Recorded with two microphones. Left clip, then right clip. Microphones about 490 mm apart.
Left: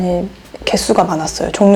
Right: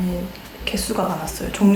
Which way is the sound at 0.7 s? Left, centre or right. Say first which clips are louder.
Left 10 dB; left.